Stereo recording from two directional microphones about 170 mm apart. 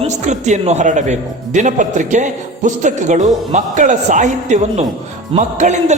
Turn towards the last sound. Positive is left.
turn(degrees=-45)  # may be behind; listen again after turning